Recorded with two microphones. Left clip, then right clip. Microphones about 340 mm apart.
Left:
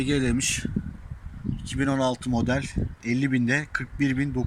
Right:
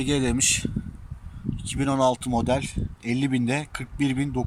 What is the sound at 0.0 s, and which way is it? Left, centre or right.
Speech, centre.